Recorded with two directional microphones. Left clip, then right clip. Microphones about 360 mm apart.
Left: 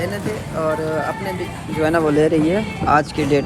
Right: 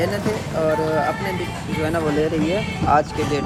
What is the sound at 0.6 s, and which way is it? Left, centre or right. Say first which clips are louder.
Speech: even; centre.